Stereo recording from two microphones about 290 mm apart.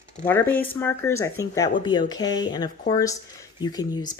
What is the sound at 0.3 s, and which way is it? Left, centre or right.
Speech, centre.